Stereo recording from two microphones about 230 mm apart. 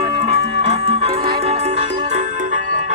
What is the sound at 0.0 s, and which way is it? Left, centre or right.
Music, right.